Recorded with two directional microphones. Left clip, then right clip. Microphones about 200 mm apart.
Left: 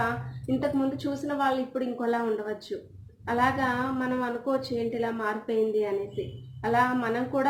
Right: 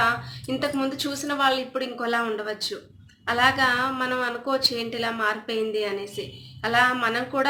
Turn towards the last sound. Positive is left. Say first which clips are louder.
# right 3 dB
turn(degrees=-25)  # may be behind; listen again after turning